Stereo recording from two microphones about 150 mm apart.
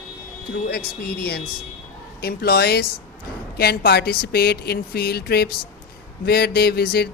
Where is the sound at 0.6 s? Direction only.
90° left.